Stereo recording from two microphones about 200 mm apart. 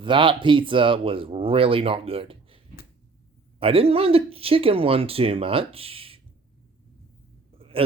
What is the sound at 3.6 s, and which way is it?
Speech, 30° right (ahead or behind).